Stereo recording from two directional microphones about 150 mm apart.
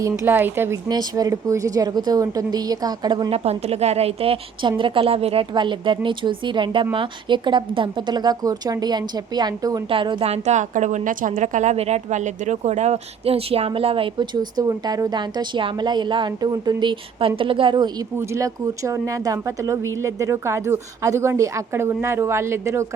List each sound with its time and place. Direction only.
0.0 s speech: 15° right (ahead or behind)
0.9 s a woman's voice: 25° right (ahead or behind)
18.2 s speech: 20° right (ahead or behind)